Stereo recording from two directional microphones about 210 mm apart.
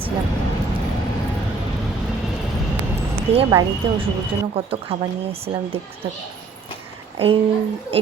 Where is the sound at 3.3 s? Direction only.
25° right (ahead or behind).